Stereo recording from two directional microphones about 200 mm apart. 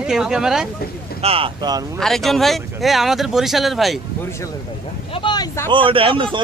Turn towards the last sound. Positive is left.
turn(degrees=-25)  # may be behind; listen again after turning